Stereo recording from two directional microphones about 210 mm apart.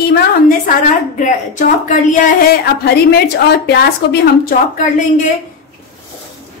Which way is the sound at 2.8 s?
50° left (ahead or behind).